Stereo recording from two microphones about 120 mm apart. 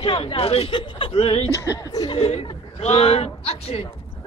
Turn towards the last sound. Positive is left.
turn(degrees=55)  # may be behind; listen again after turning